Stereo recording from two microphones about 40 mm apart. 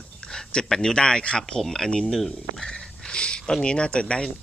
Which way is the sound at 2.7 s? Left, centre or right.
Centre.